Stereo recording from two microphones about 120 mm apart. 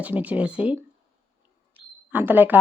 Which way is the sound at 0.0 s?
10° right (ahead or behind).